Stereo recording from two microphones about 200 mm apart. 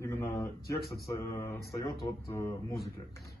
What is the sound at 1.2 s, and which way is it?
Mantra, 15° left (ahead or behind).